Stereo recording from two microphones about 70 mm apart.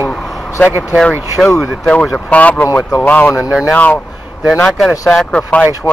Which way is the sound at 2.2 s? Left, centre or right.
Left.